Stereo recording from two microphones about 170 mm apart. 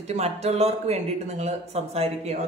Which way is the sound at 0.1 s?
40° right (ahead or behind).